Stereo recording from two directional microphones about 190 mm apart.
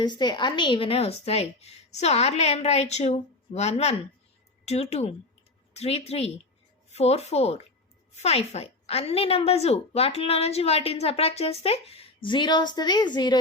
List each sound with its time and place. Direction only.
0.0 s a woman's voice: 25° left (ahead or behind)